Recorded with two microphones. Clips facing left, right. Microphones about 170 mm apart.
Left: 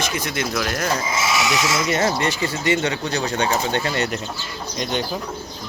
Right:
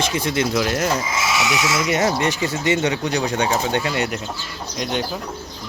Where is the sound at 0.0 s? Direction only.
25° right (ahead or behind).